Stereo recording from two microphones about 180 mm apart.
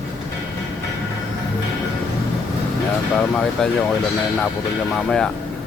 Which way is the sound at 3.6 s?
5° left (ahead or behind).